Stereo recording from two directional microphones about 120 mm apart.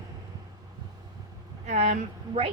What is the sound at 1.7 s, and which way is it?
Speech, 70° right (ahead or behind).